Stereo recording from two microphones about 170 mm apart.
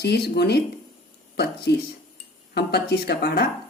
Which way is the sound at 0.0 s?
75° left (ahead or behind).